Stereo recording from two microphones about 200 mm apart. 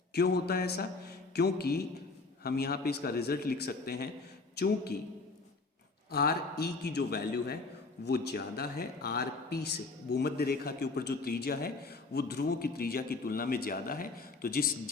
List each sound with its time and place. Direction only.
0.1 s a man's voice: 55° left (ahead or behind)
6.1 s a man's voice: 50° left (ahead or behind)